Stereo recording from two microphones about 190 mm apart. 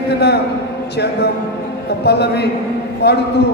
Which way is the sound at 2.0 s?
60° left (ahead or behind).